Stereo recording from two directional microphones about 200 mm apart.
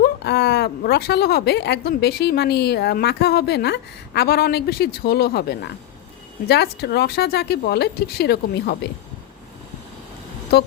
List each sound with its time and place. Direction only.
0.0 s speech: 55° left (ahead or behind)